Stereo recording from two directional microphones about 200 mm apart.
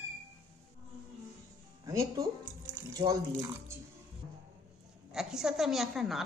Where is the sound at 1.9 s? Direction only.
15° right (ahead or behind).